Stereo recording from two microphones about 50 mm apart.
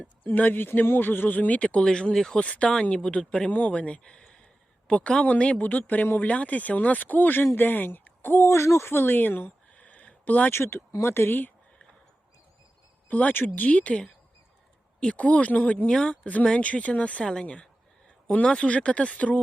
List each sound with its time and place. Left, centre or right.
0.3 s speech: left
1.8 s speech: centre
2.4 s speech: left
3.5 s speech: left
8.4 s speech: left
9.7 s a sound: left
10.5 s speech: left
13.1 s speech: left
13.3 s speech: left
13.7 s speech: left
15.0 s speech: left